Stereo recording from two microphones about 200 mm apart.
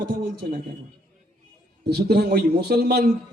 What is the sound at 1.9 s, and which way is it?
A man's voice, 55° right (ahead or behind).